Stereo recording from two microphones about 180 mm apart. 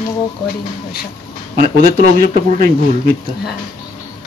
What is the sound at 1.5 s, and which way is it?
Speech, 50° right (ahead or behind).